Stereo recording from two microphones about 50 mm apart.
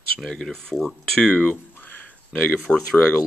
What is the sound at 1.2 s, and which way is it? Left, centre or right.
Speech, left.